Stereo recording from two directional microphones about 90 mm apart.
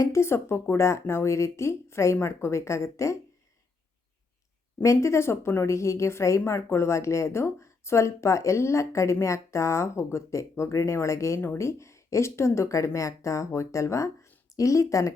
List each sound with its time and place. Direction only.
0.0 s a woman's voice: 30° left (ahead or behind)
4.8 s a woman's voice: 30° left (ahead or behind)